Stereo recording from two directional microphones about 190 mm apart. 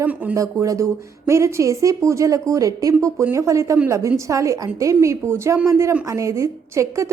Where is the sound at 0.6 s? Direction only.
15° right (ahead or behind).